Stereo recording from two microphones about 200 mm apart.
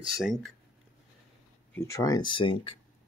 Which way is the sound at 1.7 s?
15° left (ahead or behind).